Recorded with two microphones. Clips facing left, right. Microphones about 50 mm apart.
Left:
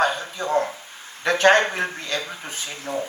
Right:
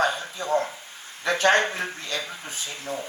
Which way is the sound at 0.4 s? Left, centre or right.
Left.